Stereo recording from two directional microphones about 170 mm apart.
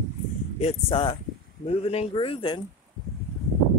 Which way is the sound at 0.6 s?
35° left (ahead or behind).